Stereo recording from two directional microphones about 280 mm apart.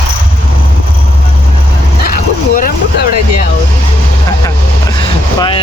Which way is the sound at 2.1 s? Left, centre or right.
Left.